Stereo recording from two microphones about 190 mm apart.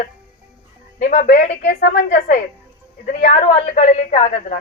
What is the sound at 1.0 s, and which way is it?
A woman's voice, 45° left (ahead or behind).